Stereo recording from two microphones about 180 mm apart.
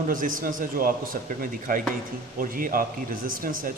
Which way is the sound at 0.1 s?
50° right (ahead or behind).